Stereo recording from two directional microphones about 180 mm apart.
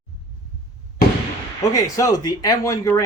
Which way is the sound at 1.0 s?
60° left (ahead or behind).